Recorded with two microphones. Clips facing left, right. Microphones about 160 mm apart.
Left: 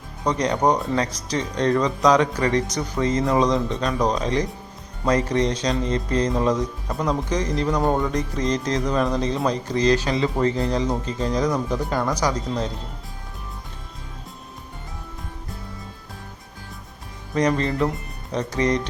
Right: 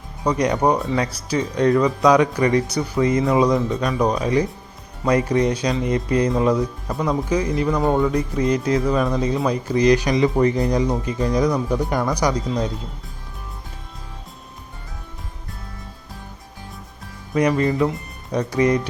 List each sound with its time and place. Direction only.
0.3 s speech: 10° right (ahead or behind)
17.3 s speech: 10° right (ahead or behind)